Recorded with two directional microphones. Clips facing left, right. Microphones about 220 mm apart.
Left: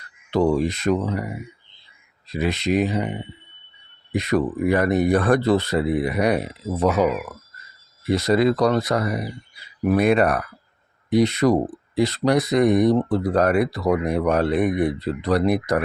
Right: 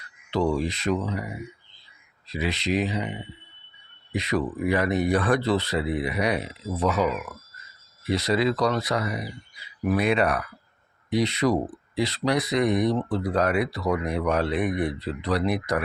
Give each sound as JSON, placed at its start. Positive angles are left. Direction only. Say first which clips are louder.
{"t": 0.3, "sound": "speech", "louder": "left 5 dB", "side_deg": 50}